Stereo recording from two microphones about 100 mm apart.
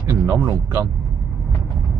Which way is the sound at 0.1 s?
35° right (ahead or behind).